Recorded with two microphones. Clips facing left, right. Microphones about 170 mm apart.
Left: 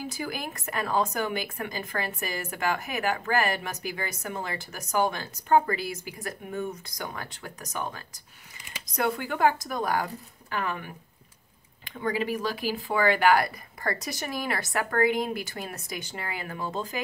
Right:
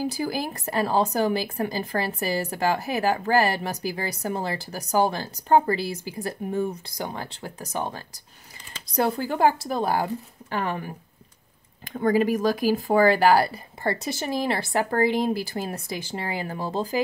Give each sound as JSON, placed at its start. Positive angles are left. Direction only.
{"t": 0.0, "sound": "a woman's voice", "side_deg": -35}
{"t": 11.8, "sound": "a woman's voice", "side_deg": -45}